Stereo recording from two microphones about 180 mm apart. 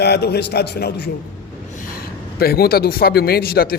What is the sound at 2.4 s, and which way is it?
Speech, 60° left (ahead or behind).